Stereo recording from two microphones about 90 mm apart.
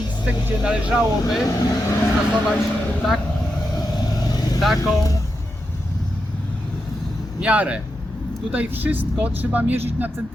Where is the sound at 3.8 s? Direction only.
45° left (ahead or behind).